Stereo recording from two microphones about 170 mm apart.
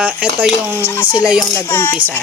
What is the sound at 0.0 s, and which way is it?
Speech, 5° right (ahead or behind).